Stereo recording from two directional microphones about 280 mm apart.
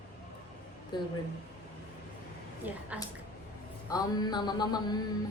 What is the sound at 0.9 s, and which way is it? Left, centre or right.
Speech, centre.